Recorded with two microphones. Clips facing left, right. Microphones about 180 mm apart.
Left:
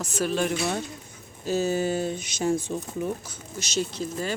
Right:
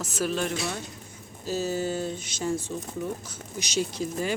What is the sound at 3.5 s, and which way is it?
Speech, 15° right (ahead or behind).